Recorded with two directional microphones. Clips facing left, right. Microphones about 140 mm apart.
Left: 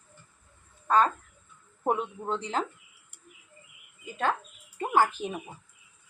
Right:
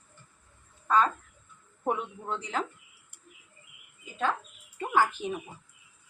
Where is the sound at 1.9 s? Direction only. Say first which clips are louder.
Left 3 dB; 30° left (ahead or behind).